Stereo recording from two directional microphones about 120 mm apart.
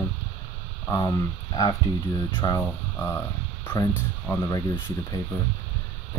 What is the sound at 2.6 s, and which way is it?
Speech, 20° left (ahead or behind).